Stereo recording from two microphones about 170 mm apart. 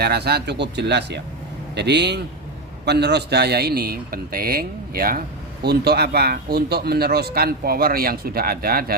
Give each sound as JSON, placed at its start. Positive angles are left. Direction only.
{"t": 0.0, "sound": "a man's voice", "side_deg": -70}
{"t": 5.6, "sound": "speech", "side_deg": -70}